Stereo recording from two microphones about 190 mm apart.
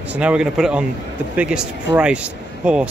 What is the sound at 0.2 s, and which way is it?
Speech, 5° right (ahead or behind).